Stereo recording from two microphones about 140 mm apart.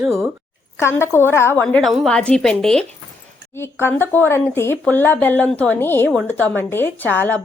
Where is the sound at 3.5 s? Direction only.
15° left (ahead or behind).